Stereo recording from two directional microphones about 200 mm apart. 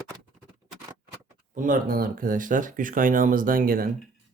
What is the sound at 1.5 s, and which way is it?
Speech, 40° right (ahead or behind).